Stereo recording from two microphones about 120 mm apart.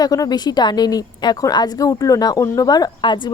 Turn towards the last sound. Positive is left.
turn(degrees=40)  # may be behind; listen again after turning